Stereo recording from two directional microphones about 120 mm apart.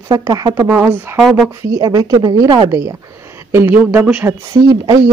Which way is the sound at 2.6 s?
25° right (ahead or behind).